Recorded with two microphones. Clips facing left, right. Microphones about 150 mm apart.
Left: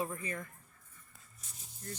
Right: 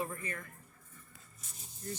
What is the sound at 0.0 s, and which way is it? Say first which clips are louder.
Speech: left 1 dB; 15° left (ahead or behind).